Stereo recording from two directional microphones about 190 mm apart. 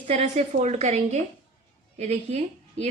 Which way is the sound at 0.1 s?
35° right (ahead or behind).